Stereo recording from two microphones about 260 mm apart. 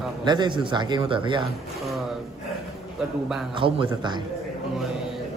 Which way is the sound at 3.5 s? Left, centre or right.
Centre.